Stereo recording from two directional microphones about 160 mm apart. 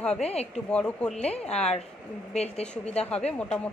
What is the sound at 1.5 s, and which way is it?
Speech, 40° left (ahead or behind).